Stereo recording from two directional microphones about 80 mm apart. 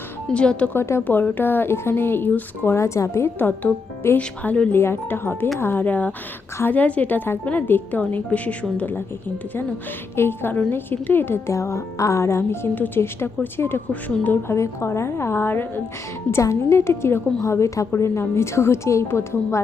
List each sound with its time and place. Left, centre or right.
0.3 s speech: centre
0.7 s a woman's voice: left
2.7 s a woman's voice: left
4.2 s speech: centre
4.7 s a woman's voice: left
10.2 s a woman's voice: left
16.3 s a woman's voice: left